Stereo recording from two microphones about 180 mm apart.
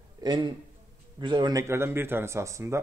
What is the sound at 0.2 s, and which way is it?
A man's voice, 20° right (ahead or behind).